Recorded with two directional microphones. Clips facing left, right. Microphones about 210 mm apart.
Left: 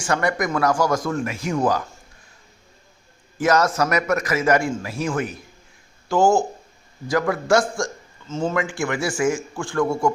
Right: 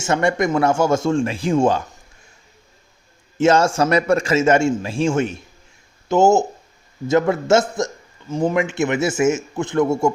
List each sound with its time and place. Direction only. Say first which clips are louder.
0.0 s a man's voice: right 4 dB; 25° right (ahead or behind)
3.3 s a man's voice: right 4 dB; 25° right (ahead or behind)